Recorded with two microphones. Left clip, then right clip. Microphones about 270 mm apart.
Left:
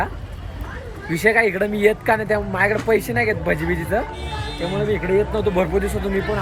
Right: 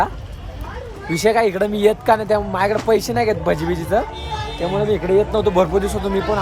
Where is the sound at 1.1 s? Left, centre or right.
Centre.